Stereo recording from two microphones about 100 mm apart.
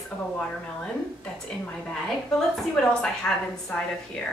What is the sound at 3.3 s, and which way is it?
Speech, 5° left (ahead or behind).